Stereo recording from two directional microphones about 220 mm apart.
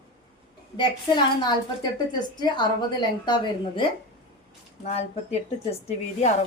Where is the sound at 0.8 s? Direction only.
20° left (ahead or behind).